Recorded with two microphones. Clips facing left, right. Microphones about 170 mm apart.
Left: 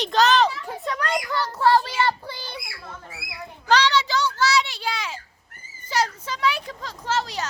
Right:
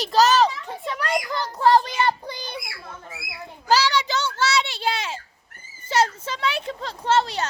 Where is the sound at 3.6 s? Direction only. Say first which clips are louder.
Even; 10° right (ahead or behind); by 5.2 s 25° right (ahead or behind).